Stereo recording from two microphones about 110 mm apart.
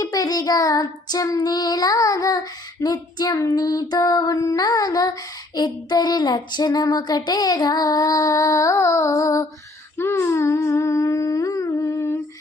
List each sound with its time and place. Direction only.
0.0 s child singing: 35° left (ahead or behind)
10.0 s humming: 20° left (ahead or behind)